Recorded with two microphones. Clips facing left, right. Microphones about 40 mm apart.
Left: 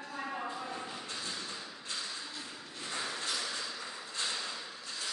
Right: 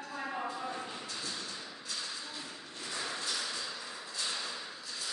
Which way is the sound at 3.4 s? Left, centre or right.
Left.